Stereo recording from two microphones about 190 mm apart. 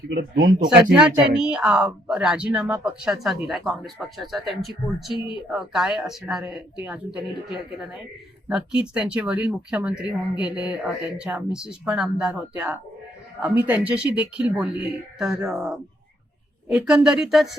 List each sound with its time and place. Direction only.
0.1 s speech: 55° right (ahead or behind)
1.4 s speech: 5° right (ahead or behind)
5.1 s speech: 25° left (ahead or behind)
5.5 s speech: 5° right (ahead or behind)
8.4 s speech: 5° right (ahead or behind)